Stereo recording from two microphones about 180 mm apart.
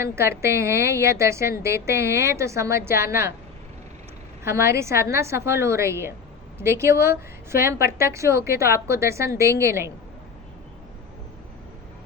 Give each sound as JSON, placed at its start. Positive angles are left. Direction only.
{"t": 0.0, "sound": "a woman's voice", "side_deg": -15}
{"t": 4.4, "sound": "a woman's voice", "side_deg": -15}